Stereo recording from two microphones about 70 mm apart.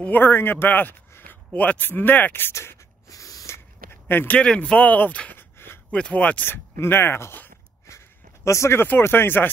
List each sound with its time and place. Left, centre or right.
0.0 s a man's voice: left
3.1 s a sound: left
3.4 s walk: left
4.4 s speech: centre
5.3 s a sound: left
5.9 s speech: centre
6.4 s speech: left
9.1 s speech: left